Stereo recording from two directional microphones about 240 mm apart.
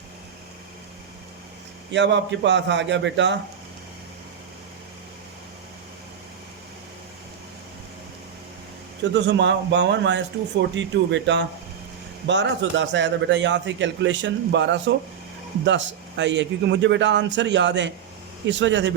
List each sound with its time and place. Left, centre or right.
1.9 s a man's voice: right
9.1 s a man's voice: right